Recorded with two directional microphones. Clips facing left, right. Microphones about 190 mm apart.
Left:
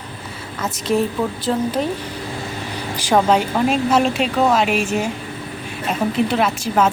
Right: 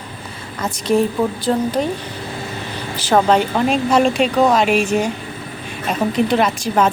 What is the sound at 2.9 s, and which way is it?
A woman's voice, 10° left (ahead or behind).